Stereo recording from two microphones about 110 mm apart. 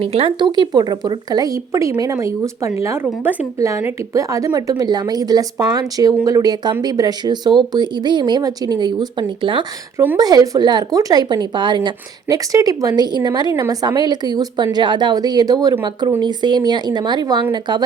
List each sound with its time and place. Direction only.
0.0 s a woman's voice: 60° right (ahead or behind)
10.2 s speech: 35° right (ahead or behind)
12.5 s a woman's voice: 30° right (ahead or behind)